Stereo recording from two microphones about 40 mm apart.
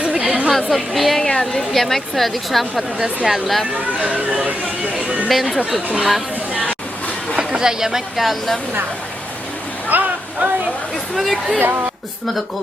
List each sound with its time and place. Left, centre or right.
0.3 s chatter: right
0.5 s a woman's voice: centre
1.3 s a woman's voice: centre
4.9 s chatter: right
5.3 s a woman's voice: centre
7.3 s speech: centre
9.9 s a sound: right
11.2 s a woman's voice: centre